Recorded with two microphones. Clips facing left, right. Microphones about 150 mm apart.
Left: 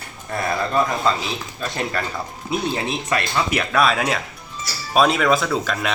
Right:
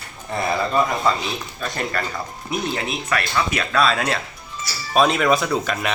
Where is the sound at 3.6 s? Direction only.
5° left (ahead or behind).